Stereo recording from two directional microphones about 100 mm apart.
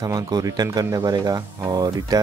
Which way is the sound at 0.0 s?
40° right (ahead or behind).